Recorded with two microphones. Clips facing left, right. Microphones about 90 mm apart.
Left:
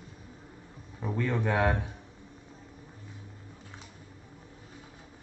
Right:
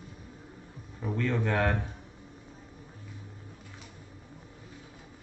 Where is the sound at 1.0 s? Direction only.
15° left (ahead or behind).